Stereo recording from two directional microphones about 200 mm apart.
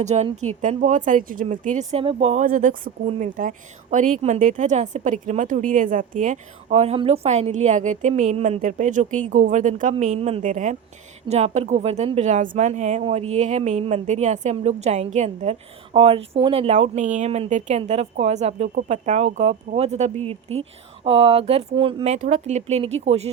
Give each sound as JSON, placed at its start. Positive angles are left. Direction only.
{"t": 0.0, "sound": "speech", "side_deg": -35}